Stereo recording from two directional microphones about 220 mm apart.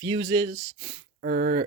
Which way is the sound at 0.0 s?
15° right (ahead or behind).